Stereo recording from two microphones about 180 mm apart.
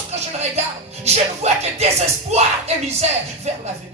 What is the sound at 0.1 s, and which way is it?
Speech, 35° right (ahead or behind).